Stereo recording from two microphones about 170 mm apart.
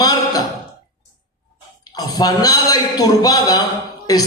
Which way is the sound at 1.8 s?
25° left (ahead or behind).